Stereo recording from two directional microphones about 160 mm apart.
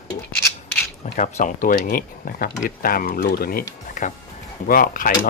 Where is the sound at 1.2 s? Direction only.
50° left (ahead or behind); by 3.6 s 70° left (ahead or behind).